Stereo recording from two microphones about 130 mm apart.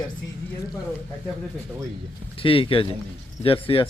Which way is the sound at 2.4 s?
45° left (ahead or behind).